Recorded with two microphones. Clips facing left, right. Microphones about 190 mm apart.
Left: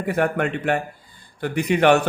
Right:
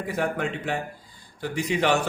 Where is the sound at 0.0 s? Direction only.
60° left (ahead or behind).